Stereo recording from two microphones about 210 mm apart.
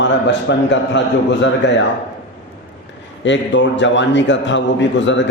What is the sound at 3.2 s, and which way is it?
A man's voice, 60° left (ahead or behind).